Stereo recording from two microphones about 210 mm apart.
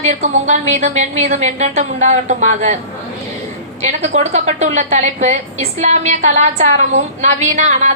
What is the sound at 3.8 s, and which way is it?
A woman's voice, 30° right (ahead or behind).